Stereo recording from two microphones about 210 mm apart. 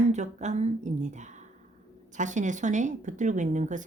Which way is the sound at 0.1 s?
35° right (ahead or behind).